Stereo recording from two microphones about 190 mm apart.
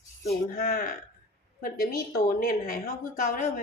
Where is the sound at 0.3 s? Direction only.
50° left (ahead or behind).